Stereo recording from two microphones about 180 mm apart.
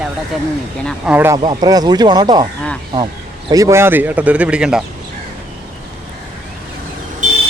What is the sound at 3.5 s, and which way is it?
Speech, 15° right (ahead or behind).